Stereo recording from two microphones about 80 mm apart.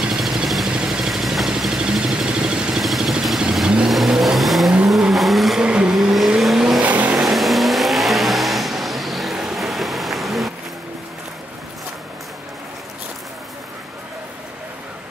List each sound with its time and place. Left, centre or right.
0.0 s vehicle: centre
6.8 s vehicle: centre
7.2 s vehicle: centre